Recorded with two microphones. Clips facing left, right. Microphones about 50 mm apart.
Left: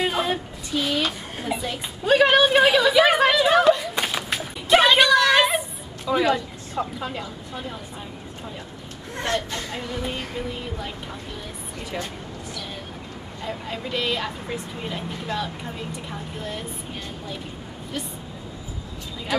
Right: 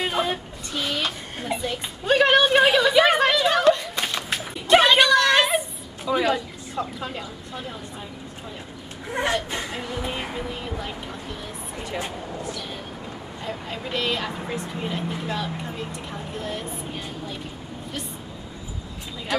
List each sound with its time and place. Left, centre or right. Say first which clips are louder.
0.0 s a sound: left 1 dB; centre
6.8 s speech: left 2 dB; centre
9.1 s speech: right 2 dB; centre
10.4 s speech: even; centre
13.4 s speech: left 2 dB; centre